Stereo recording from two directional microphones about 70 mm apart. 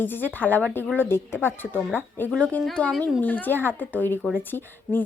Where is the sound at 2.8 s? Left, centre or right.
Centre.